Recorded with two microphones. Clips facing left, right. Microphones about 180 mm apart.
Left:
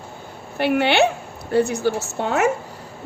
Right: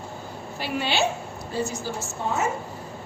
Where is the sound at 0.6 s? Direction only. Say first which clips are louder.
Left 9 dB; 65° left (ahead or behind).